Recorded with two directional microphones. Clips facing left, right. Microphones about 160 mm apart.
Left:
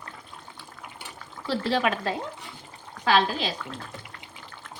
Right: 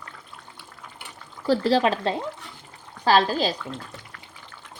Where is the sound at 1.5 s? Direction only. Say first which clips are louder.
Right 5 dB; 35° right (ahead or behind).